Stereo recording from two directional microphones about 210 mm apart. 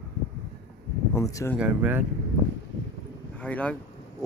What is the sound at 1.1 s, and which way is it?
Speech, 15° left (ahead or behind).